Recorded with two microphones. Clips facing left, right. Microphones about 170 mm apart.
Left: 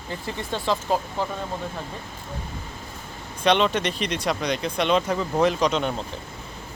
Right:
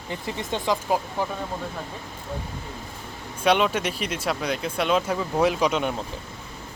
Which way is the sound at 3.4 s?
10° right (ahead or behind).